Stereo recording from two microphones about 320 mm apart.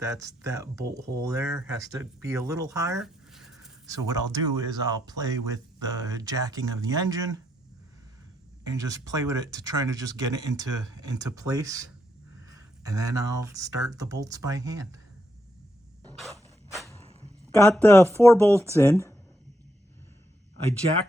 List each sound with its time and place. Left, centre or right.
0.0 s speech: centre
8.6 s speech: centre
16.6 s a sound: centre
17.7 s speech: centre
18.2 s speech: centre
18.7 s speech: centre